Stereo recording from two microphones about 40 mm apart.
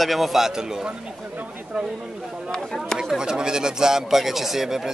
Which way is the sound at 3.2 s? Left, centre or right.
Centre.